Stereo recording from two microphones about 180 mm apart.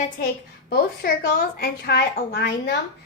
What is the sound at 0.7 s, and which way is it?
A woman's voice, 55° left (ahead or behind).